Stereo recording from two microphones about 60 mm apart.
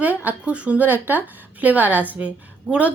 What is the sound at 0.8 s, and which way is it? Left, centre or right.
A woman's voice, right.